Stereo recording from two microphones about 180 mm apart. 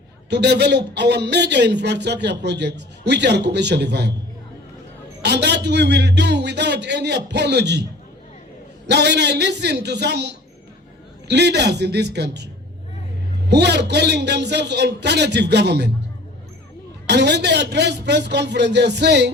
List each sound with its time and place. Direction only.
0.3 s a man's voice: 70° right (ahead or behind)
5.2 s a man's voice: 70° right (ahead or behind)
8.9 s a man's voice: 70° right (ahead or behind)
13.5 s a man's voice: 70° right (ahead or behind)
17.1 s a man's voice: 70° right (ahead or behind)